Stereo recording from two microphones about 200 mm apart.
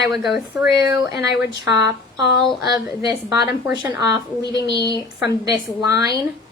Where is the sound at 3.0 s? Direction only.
20° right (ahead or behind).